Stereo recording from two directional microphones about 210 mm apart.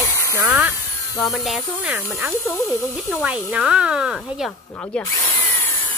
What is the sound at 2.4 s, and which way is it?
Speech, 15° left (ahead or behind).